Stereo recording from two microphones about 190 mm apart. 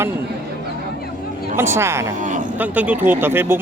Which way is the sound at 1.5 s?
15° right (ahead or behind).